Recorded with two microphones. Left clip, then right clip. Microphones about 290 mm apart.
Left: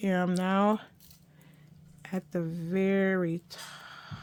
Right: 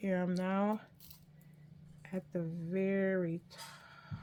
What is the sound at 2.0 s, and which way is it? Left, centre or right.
Speech, left.